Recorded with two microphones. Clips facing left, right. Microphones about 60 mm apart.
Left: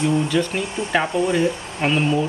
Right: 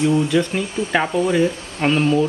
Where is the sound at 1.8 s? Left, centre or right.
Centre.